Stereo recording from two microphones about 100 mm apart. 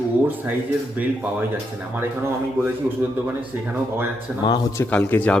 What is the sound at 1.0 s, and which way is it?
Speech, 15° right (ahead or behind).